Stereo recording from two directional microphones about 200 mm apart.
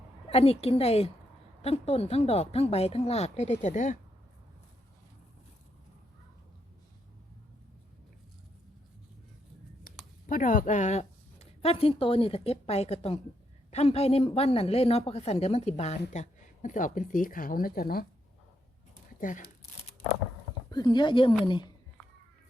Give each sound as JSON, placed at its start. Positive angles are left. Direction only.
{"t": 0.3, "sound": "speech", "side_deg": 30}
{"t": 10.2, "sound": "speech", "side_deg": 40}
{"t": 19.2, "sound": "speech", "side_deg": 40}
{"t": 20.7, "sound": "speech", "side_deg": 20}